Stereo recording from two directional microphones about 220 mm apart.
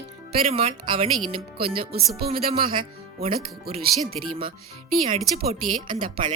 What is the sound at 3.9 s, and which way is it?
Speech, centre (ahead or behind).